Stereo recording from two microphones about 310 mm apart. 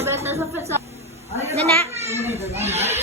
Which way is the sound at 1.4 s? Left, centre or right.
Centre.